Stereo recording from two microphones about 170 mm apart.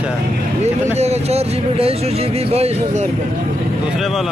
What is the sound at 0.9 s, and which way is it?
Speech, 40° right (ahead or behind).